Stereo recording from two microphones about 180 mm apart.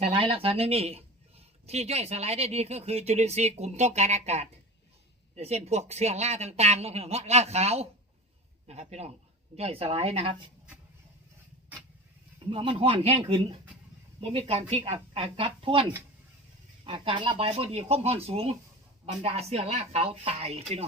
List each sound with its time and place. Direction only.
0.0 s speech: 30° right (ahead or behind)
12.5 s speech: 30° right (ahead or behind)